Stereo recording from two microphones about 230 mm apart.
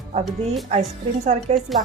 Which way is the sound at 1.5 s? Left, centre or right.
Right.